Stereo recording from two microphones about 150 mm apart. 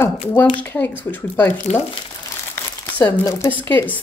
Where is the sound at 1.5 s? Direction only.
50° left (ahead or behind).